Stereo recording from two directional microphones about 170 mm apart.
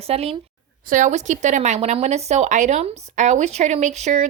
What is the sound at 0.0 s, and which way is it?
Speech, 35° right (ahead or behind).